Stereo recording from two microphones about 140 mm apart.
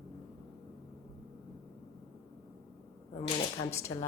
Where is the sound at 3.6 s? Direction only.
30° left (ahead or behind).